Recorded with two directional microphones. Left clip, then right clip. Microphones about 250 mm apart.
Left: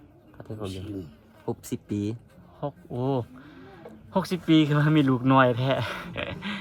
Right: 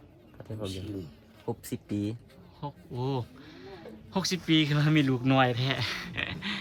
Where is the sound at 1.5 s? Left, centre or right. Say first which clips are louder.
Left 3 dB; left.